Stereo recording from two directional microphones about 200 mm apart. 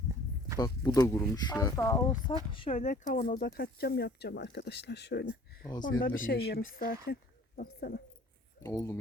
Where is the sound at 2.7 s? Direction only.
40° left (ahead or behind).